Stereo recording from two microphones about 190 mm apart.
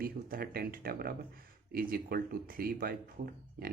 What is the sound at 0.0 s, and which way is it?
Speech, 50° right (ahead or behind).